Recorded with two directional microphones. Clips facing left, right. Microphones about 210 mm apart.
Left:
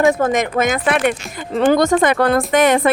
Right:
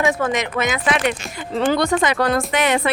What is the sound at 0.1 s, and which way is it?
A woman's voice, 45° left (ahead or behind).